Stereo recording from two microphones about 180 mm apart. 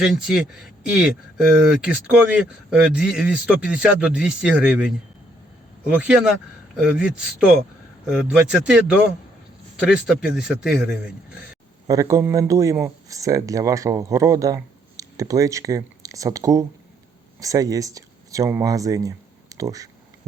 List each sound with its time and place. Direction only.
0.0 s a man's voice: centre (ahead or behind)
11.9 s speech: 15° right (ahead or behind)